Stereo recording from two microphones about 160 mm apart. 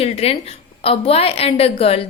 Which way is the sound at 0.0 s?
40° left (ahead or behind).